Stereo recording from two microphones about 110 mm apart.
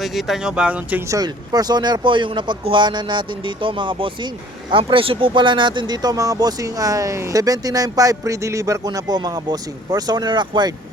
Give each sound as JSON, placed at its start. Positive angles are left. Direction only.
{"t": 0.0, "sound": "speech", "side_deg": 0}
{"t": 1.1, "sound": "speech", "side_deg": -35}